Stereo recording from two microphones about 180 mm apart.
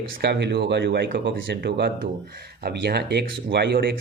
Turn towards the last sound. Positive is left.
turn(degrees=-65)  # may be behind; listen again after turning